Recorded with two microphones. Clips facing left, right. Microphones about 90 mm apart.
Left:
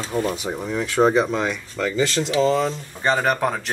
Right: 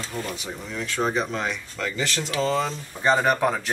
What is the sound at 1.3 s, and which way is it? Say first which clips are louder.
Speech: left 5 dB; 5° left (ahead or behind).